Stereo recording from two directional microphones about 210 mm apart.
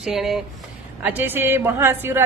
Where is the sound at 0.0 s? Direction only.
Centre (ahead or behind).